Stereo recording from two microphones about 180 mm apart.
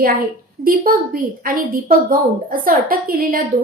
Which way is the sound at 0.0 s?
55° right (ahead or behind).